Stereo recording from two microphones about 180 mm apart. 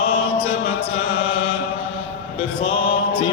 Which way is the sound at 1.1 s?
30° left (ahead or behind).